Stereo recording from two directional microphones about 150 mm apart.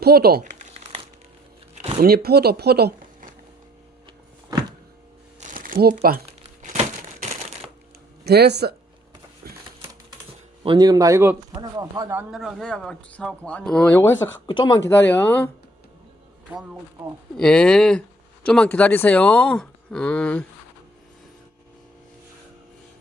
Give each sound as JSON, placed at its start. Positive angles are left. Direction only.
{"t": 0.0, "sound": "speech", "side_deg": -90}
{"t": 0.6, "sound": "crumpling", "side_deg": -45}
{"t": 2.0, "sound": "speech", "side_deg": -90}
{"t": 5.4, "sound": "crumpling", "side_deg": -60}
{"t": 6.6, "sound": "crumpling", "side_deg": -55}
{"t": 8.2, "sound": "speech", "side_deg": -90}
{"t": 10.6, "sound": "speech", "side_deg": -30}
{"t": 12.3, "sound": "speech", "side_deg": 0}
{"t": 14.4, "sound": "speech", "side_deg": 30}
{"t": 14.8, "sound": "speech", "side_deg": 15}
{"t": 17.3, "sound": "speech", "side_deg": 5}